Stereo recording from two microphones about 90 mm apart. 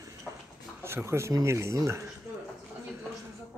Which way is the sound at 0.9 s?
30° right (ahead or behind).